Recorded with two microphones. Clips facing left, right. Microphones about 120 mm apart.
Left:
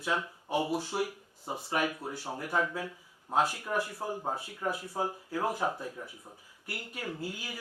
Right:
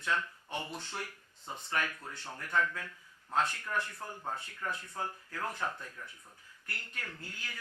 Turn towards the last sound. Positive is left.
turn(degrees=10)  # may be behind; listen again after turning